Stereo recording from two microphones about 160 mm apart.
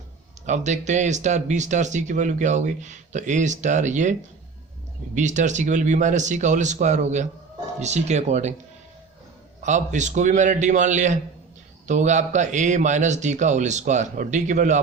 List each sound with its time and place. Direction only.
0.4 s speech: 45° right (ahead or behind)
5.1 s speech: 50° right (ahead or behind)
9.6 s speech: 50° right (ahead or behind)